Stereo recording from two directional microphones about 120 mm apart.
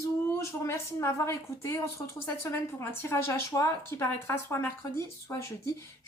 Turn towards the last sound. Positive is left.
turn(degrees=25)  # may be behind; listen again after turning